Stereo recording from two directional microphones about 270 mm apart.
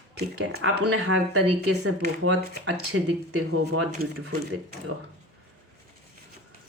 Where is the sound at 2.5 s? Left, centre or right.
Right.